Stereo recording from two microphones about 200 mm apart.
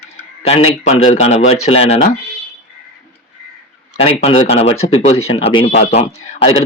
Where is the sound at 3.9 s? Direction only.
30° left (ahead or behind).